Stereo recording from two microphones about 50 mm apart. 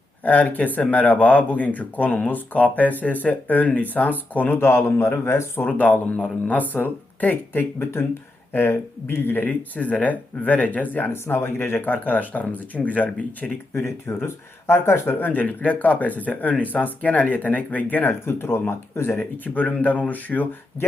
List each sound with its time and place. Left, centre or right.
0.2 s speech: left
4.5 s a man's voice: left
5.6 s speech: left
11.1 s a man's voice: left
11.9 s speech: left
13.7 s speech: left
15.2 s speech: left